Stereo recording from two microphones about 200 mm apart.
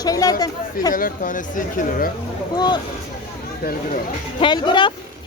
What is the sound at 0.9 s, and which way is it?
Speech, 45° left (ahead or behind).